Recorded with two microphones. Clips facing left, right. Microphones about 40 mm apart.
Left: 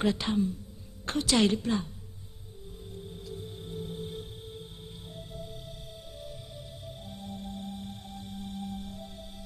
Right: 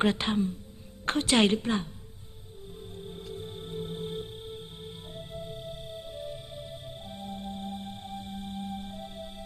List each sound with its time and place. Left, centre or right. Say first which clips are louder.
0.0 s a woman's voice: right 1 dB; right
2.9 s music: right 1 dB; right